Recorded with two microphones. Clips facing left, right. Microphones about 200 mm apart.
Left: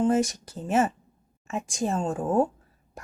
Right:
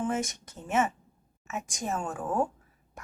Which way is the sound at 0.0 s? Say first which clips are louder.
Left 8 dB; 35° left (ahead or behind).